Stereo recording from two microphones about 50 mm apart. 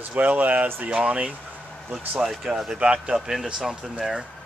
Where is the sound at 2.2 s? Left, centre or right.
Centre.